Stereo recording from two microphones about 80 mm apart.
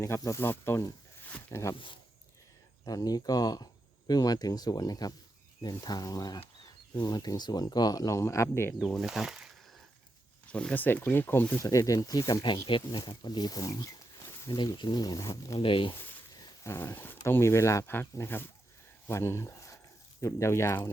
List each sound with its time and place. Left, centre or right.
0.3 s speech: left
1.2 s a sound: left
2.8 s speech: left
8.8 s speech: centre
10.5 s speech: centre
10.8 s speech: left
11.6 s speech: left
12.6 s speech: left
13.1 s speech: left
15.5 s speech: left
16.6 s speech: left
19.0 s a sound: left
20.2 s speech: left